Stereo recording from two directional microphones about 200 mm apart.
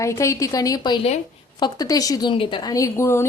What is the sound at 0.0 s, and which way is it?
A woman's voice, 15° left (ahead or behind).